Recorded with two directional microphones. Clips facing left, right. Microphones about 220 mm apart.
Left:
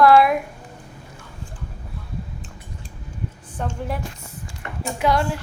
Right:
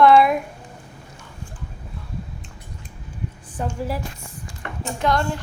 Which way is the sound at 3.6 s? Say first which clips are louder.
Right 1 dB; 5° right (ahead or behind).